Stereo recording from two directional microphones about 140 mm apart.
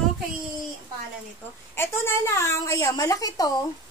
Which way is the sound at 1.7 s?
15° left (ahead or behind).